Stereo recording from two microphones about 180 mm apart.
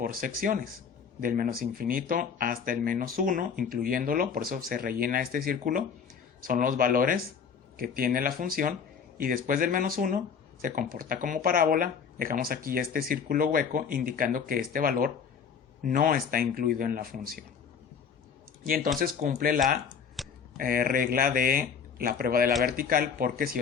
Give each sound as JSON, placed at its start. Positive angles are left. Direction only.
{"t": 0.0, "sound": "speech", "side_deg": -50}
{"t": 18.6, "sound": "speech", "side_deg": -50}
{"t": 20.2, "sound": "computer keyboard", "side_deg": 0}
{"t": 20.6, "sound": "speech", "side_deg": -50}